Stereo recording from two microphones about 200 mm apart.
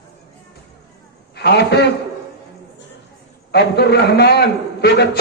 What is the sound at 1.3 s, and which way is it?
Speech, 55° left (ahead or behind).